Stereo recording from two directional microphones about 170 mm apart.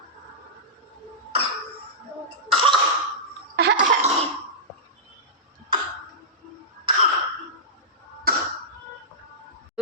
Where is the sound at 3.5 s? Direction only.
80° right.